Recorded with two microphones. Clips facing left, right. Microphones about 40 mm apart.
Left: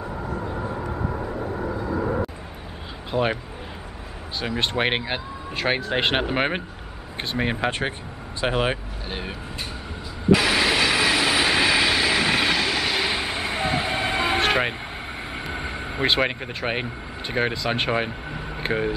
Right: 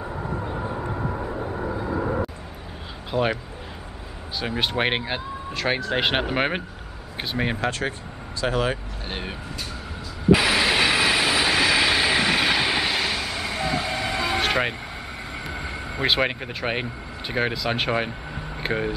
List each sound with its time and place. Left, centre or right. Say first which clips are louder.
0.9 s vehicle: even; centre
3.1 s speech: even; centre
4.5 s speech: even; centre
8.4 s speech: left 1 dB; left
10.3 s train: even; centre
12.5 s train: right 1 dB; centre
13.0 s train: left 1 dB; left
14.4 s vehicle: left 2 dB; centre
15.5 s vehicle: left 1 dB; left
16.0 s speech: even; centre